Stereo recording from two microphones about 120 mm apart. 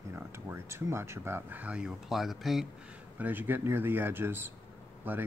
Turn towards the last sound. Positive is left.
turn(degrees=-15)  # may be behind; listen again after turning